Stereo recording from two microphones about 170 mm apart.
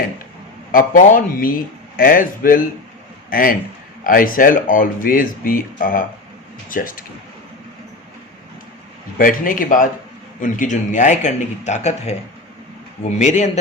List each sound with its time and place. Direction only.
0.7 s a man's voice: 55° left (ahead or behind)
9.1 s speech: 55° left (ahead or behind)